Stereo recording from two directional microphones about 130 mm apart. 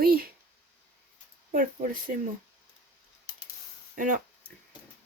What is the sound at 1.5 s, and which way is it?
Speech, 90° right.